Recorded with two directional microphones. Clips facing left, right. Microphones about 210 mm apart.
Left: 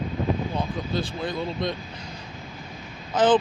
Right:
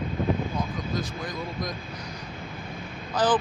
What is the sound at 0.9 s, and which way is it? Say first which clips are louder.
Speech: left 5 dB; 30° left (ahead or behind).